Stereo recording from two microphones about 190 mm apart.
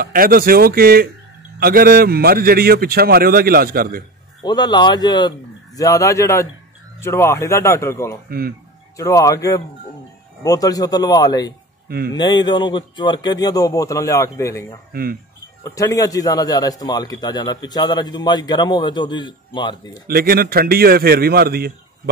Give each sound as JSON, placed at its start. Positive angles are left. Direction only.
{"t": 0.0, "sound": "a man's voice", "side_deg": -50}
{"t": 4.4, "sound": "a man's voice", "side_deg": 20}
{"t": 8.3, "sound": "a man's voice", "side_deg": -50}
{"t": 8.9, "sound": "a man's voice", "side_deg": 15}
{"t": 14.9, "sound": "speech", "side_deg": -50}
{"t": 15.6, "sound": "a man's voice", "side_deg": 15}
{"t": 20.1, "sound": "a man's voice", "side_deg": -50}